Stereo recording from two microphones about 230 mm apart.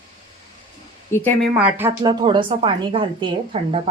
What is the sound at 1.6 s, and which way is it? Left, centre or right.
Speech, centre.